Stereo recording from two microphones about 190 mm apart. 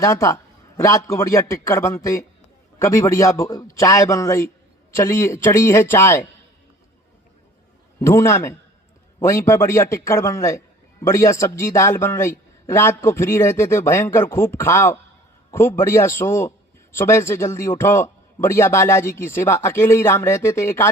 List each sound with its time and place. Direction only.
0.0 s a man's voice: 15° left (ahead or behind)
8.0 s a man's voice: 15° left (ahead or behind)